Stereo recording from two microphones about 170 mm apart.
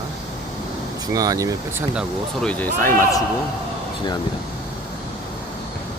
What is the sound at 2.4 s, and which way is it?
Speech, 10° left (ahead or behind).